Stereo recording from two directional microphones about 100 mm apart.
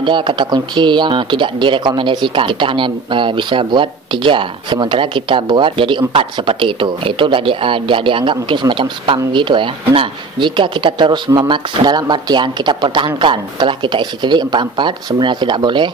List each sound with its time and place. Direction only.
0.0 s speech: 55° right (ahead or behind)